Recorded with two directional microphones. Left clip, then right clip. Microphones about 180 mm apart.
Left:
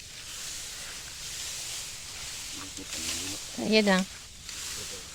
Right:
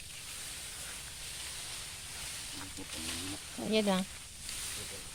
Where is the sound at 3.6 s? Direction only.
40° left (ahead or behind).